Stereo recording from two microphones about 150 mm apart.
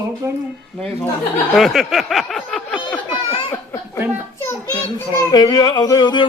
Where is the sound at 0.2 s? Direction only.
20° right (ahead or behind).